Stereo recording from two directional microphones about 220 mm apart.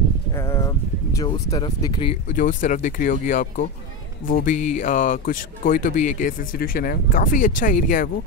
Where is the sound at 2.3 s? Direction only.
35° left (ahead or behind).